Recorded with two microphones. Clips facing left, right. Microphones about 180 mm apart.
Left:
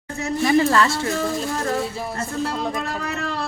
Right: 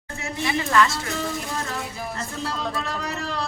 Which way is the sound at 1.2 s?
45° left (ahead or behind).